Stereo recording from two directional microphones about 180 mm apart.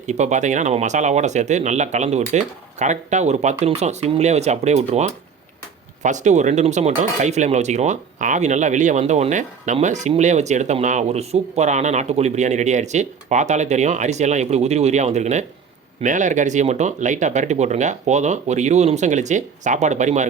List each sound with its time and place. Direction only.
0.1 s speech: 40° right (ahead or behind)